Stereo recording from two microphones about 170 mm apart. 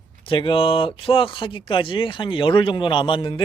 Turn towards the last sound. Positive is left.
turn(degrees=30)  # may be behind; listen again after turning